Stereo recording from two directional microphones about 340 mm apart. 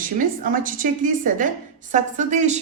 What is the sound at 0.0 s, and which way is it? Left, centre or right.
A woman's voice, right.